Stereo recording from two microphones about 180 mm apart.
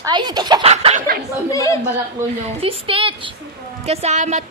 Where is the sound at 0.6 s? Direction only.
35° right (ahead or behind).